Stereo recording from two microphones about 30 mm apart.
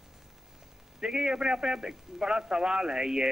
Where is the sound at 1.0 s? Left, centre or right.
Right.